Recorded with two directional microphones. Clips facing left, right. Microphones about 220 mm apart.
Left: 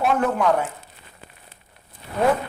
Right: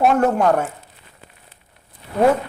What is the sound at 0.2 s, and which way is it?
Speech, 45° right (ahead or behind).